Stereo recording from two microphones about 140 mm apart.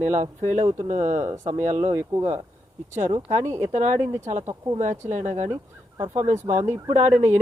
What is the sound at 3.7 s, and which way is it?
Speech, 60° right (ahead or behind).